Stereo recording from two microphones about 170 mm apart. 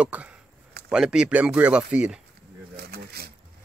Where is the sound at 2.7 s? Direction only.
65° right (ahead or behind).